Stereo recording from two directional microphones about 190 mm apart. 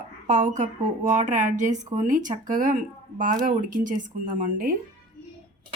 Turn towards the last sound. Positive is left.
turn(degrees=-45)  # may be behind; listen again after turning